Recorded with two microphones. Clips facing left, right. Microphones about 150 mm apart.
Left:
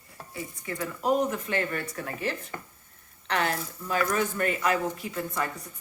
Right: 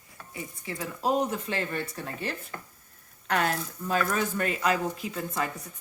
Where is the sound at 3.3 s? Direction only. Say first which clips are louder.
Right 1 dB; 40° right (ahead or behind).